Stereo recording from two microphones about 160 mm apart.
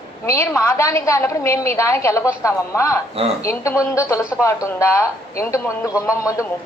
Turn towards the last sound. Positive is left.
turn(degrees=20)  # may be behind; listen again after turning